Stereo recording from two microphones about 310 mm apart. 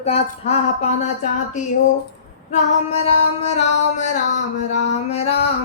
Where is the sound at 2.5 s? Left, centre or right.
Centre.